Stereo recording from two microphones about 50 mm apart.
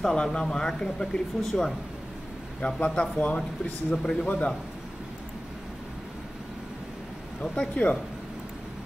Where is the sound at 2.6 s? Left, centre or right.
Left.